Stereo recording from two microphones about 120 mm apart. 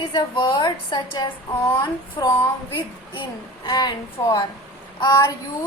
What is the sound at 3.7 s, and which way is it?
A woman's voice, 35° left (ahead or behind).